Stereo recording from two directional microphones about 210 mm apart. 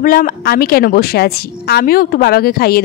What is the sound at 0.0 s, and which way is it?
A woman's voice, 45° left (ahead or behind).